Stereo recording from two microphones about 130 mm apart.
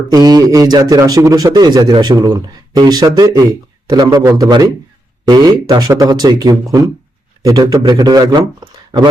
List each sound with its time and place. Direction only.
0.1 s a man's voice: 30° right (ahead or behind)